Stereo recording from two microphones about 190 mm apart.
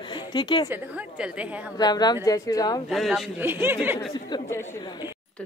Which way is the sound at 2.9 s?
Centre (ahead or behind).